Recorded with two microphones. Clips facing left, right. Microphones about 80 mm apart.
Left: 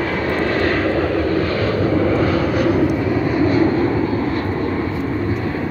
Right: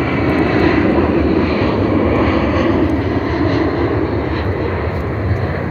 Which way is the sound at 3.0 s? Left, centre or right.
Right.